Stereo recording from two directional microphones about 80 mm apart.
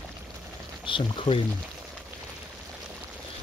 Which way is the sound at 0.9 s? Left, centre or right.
Left.